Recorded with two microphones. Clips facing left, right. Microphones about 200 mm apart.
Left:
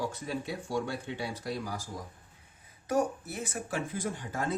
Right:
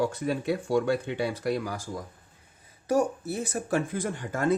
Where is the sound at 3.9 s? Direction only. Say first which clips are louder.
Right 4 dB; 55° right (ahead or behind).